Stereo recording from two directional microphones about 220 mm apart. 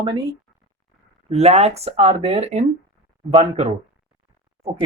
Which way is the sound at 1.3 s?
30° right (ahead or behind).